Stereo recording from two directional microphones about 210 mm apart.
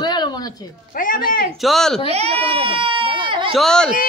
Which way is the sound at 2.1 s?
30° right (ahead or behind).